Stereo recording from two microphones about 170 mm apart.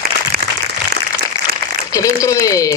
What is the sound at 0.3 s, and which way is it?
Applause, 65° right (ahead or behind).